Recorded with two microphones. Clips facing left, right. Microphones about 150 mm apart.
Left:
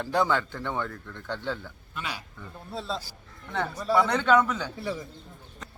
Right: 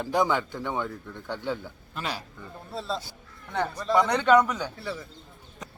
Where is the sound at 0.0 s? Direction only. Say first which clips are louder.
Right 1 dB; 15° right (ahead or behind).